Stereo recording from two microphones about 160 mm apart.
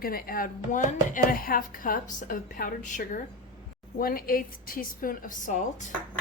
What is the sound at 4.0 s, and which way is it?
Speech, 65° left (ahead or behind).